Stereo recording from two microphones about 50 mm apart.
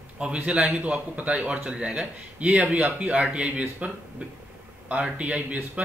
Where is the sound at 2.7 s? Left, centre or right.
Right.